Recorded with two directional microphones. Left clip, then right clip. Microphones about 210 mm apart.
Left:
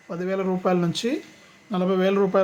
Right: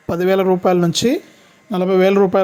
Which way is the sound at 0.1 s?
45° right (ahead or behind).